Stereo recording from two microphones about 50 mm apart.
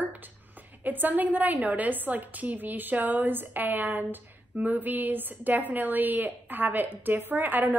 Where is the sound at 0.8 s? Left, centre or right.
Right.